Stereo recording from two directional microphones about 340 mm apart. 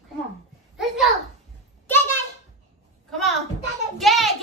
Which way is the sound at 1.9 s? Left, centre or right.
Centre.